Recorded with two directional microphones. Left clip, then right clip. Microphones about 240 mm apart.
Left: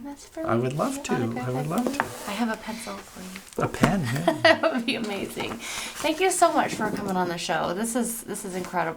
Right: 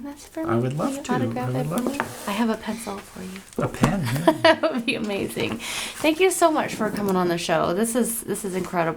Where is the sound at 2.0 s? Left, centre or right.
Centre.